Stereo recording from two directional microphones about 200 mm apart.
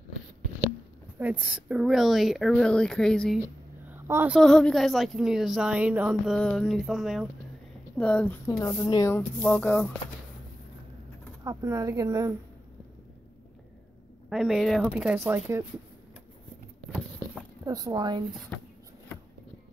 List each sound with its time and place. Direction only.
1.2 s a woman's voice: 5° right (ahead or behind)
3.9 s a sound: 10° right (ahead or behind)
4.4 s a woman's voice: 5° left (ahead or behind)
11.4 s speech: 15° right (ahead or behind)
14.3 s a woman's voice: centre (ahead or behind)
17.6 s speech: 20° right (ahead or behind)
18.5 s speech: 5° left (ahead or behind)